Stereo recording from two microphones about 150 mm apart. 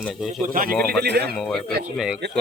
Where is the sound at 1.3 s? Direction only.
5° left (ahead or behind).